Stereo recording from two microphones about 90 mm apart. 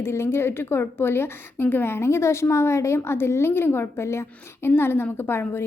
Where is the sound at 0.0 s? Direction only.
30° left (ahead or behind).